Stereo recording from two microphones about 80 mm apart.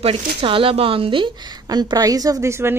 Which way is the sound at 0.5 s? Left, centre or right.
Right.